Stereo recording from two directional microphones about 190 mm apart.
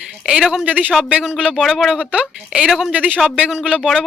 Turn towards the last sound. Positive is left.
turn(degrees=-5)  # may be behind; listen again after turning